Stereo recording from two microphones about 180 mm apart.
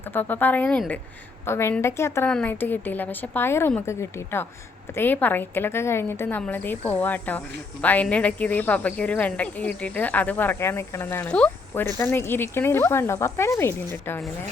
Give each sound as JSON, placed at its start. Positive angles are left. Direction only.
{"t": 0.1, "sound": "a woman's voice", "side_deg": 10}